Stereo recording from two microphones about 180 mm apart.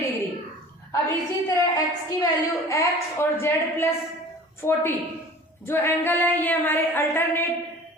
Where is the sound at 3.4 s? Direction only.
15° left (ahead or behind).